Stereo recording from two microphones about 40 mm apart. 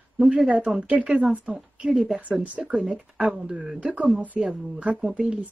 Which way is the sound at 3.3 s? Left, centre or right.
Centre.